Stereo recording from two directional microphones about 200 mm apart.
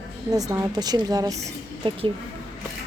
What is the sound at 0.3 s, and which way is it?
A woman's voice, 15° right (ahead or behind).